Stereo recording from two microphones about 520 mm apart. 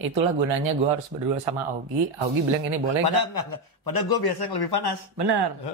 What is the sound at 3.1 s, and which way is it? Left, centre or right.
A man's voice, left.